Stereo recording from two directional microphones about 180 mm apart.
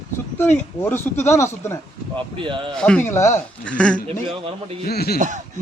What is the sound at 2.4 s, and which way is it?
Speech, 25° right (ahead or behind).